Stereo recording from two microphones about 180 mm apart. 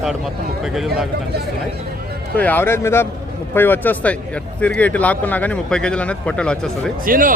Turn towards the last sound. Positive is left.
turn(degrees=-50)  # may be behind; listen again after turning